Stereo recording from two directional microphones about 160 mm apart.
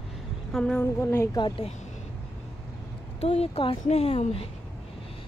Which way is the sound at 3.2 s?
35° left (ahead or behind).